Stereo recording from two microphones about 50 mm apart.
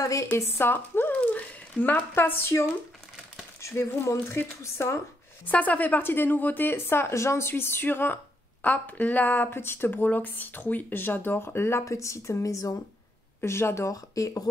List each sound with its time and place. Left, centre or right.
0.4 s speech: left
1.2 s a sound: left
1.9 s speech: left
3.7 s speech: left
5.5 s speech: left
8.6 s speech: left
9.5 s speech: left
11.8 s a woman's voice: left
13.4 s speech: left